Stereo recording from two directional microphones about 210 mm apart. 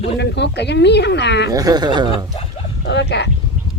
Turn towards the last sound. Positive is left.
turn(degrees=55)  # may be behind; listen again after turning